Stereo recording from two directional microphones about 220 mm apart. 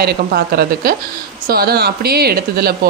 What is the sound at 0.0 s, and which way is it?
A woman's voice, 45° right (ahead or behind).